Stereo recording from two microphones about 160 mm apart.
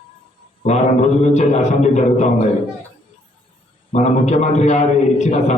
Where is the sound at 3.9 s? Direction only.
45° left (ahead or behind).